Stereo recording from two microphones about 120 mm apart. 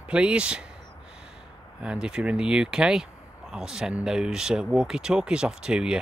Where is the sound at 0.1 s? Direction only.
10° right (ahead or behind).